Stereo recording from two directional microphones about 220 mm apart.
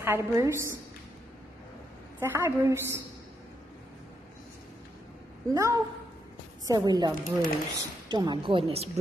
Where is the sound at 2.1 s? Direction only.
10° right (ahead or behind).